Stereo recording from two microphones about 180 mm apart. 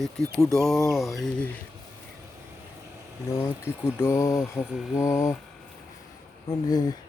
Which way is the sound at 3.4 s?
15° left (ahead or behind).